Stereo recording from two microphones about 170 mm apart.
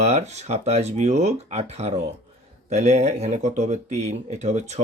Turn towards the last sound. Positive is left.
turn(degrees=-40)  # may be behind; listen again after turning